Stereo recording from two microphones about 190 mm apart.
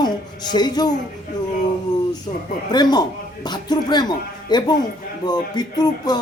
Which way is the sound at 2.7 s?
20° left (ahead or behind).